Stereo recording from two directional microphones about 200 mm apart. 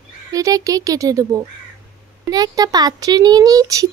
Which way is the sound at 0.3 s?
15° right (ahead or behind).